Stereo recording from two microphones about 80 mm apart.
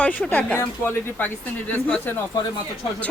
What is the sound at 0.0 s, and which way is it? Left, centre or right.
Speech, centre.